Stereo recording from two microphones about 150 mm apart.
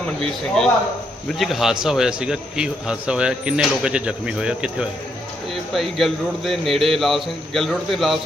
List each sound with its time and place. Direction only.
0.6 s speech: 5° left (ahead or behind)